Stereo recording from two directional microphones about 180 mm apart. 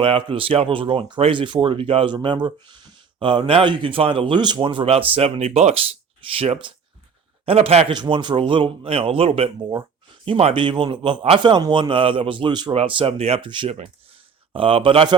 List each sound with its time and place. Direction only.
0.0 s speech: 30° right (ahead or behind)